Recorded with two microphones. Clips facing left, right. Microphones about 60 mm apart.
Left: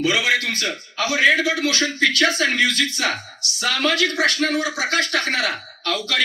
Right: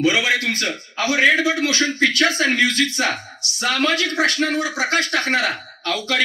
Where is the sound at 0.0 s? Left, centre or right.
Right.